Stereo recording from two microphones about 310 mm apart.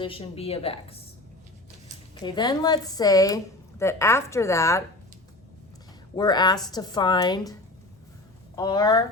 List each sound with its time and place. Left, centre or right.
0.0 s a woman's voice: centre
2.2 s a woman's voice: centre
6.1 s a woman's voice: centre
8.5 s a woman's voice: centre